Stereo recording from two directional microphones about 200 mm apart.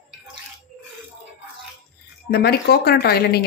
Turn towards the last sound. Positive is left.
turn(degrees=50)  # may be behind; listen again after turning